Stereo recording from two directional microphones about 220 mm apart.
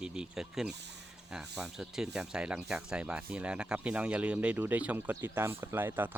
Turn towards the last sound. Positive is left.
turn(degrees=-10)  # may be behind; listen again after turning